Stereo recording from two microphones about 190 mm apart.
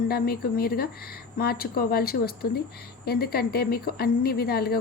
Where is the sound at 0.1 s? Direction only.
55° left (ahead or behind).